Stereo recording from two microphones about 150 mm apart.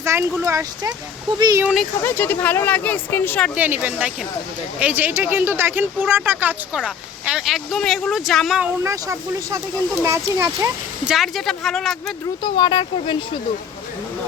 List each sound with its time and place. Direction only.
0.0 s speech: 15° right (ahead or behind)
1.6 s speech: centre (ahead or behind)
2.0 s speech: 15° left (ahead or behind)
3.5 s speech: 10° right (ahead or behind)
8.8 s speech: 20° right (ahead or behind)
11.0 s speech: centre (ahead or behind)
12.4 s speech: 30° left (ahead or behind)